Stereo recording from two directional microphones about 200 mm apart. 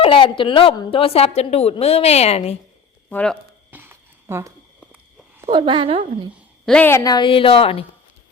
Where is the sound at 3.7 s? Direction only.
10° right (ahead or behind).